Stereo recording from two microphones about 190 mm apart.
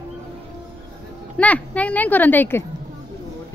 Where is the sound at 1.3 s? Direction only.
5° left (ahead or behind).